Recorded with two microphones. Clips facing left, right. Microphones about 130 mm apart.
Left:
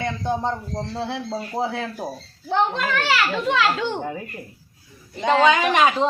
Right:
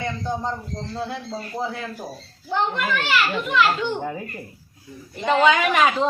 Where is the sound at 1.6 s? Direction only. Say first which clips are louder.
Left 3 dB; 75° left (ahead or behind).